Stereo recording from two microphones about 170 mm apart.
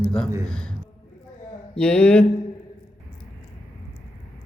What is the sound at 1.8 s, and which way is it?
Speech, 5° left (ahead or behind).